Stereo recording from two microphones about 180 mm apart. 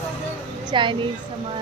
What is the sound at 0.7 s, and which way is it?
Speech, 25° right (ahead or behind).